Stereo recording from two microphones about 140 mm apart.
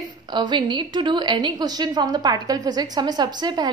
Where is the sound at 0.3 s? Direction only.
30° right (ahead or behind).